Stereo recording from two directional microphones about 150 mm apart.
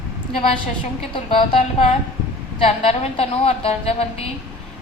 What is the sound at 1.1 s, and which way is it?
A woman's voice, 35° left (ahead or behind).